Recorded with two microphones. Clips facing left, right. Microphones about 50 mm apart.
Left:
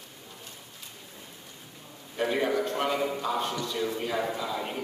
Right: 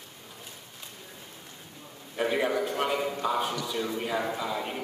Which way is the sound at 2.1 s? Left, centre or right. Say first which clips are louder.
Even; centre.